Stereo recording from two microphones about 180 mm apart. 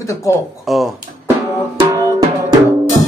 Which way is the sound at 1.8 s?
20° right (ahead or behind).